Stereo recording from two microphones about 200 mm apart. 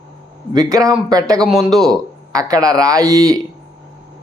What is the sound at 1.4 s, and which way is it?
Speech, centre (ahead or behind).